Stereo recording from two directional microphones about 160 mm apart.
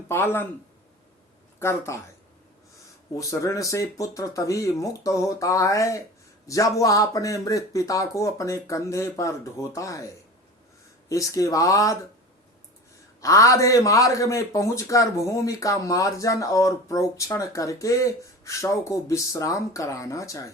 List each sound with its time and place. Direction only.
0.1 s speech: 15° left (ahead or behind)
1.5 s speech: 15° left (ahead or behind)
3.2 s a man's voice: 20° left (ahead or behind)
11.1 s a man's voice: 20° left (ahead or behind)
13.2 s a man's voice: 20° left (ahead or behind)